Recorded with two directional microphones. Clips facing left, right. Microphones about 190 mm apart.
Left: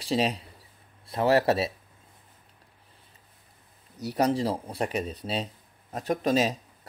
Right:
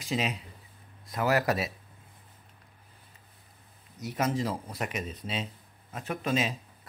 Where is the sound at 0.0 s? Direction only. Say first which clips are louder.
Left 5 dB; 35° left (ahead or behind).